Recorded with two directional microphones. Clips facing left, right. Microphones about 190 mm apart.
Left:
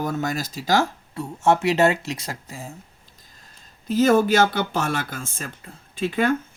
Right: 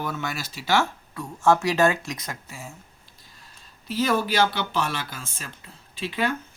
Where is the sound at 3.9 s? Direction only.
50° left (ahead or behind).